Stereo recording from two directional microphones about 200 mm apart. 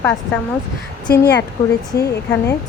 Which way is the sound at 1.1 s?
55° left (ahead or behind).